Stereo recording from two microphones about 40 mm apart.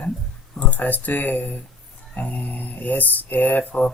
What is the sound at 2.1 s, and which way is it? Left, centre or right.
Speech, left.